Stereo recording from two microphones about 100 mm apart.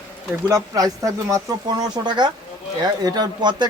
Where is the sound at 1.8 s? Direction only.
45° right (ahead or behind).